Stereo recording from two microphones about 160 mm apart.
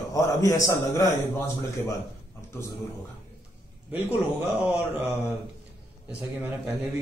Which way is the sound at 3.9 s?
10° right (ahead or behind).